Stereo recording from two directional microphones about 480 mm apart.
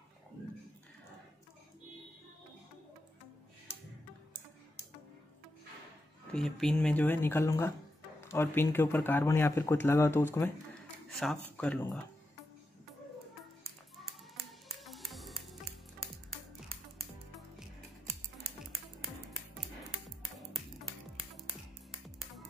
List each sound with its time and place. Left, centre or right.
6.3 s speech: centre
13.7 s clapping: centre
14.8 s music: centre